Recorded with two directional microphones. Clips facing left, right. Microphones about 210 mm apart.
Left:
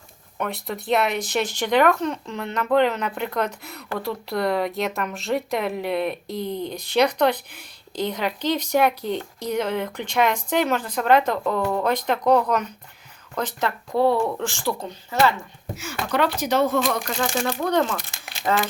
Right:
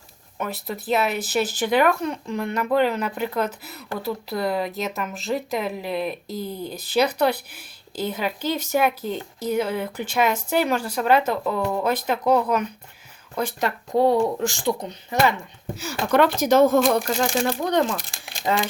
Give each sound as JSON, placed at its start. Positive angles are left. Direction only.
{"t": 0.3, "sound": "speech", "side_deg": -5}
{"t": 15.7, "sound": "speech", "side_deg": -40}
{"t": 17.2, "sound": "speech", "side_deg": -25}